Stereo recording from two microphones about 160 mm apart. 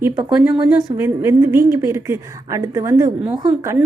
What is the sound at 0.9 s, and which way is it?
A woman's voice, 15° right (ahead or behind).